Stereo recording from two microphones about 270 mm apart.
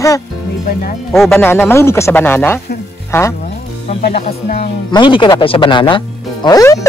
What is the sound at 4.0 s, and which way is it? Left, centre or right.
Speech, left.